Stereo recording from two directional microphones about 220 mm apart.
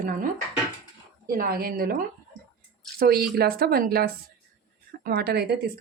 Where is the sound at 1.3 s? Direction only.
45° right (ahead or behind).